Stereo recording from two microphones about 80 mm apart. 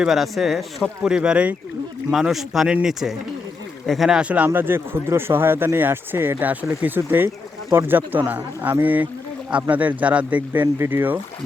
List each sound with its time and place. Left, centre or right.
0.0 s speech: centre
4.2 s speech: centre
4.4 s speech: right